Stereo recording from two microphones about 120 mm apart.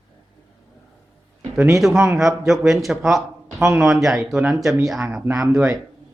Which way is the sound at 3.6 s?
25° right (ahead or behind).